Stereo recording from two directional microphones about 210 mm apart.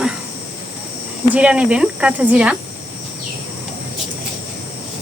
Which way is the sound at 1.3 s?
5° right (ahead or behind).